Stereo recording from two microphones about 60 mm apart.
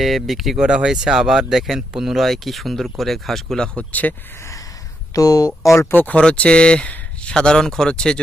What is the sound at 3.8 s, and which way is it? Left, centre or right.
Speech, left.